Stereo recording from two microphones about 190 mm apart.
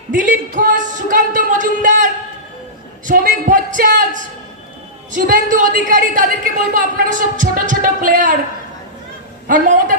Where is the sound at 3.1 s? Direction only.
45° right (ahead or behind).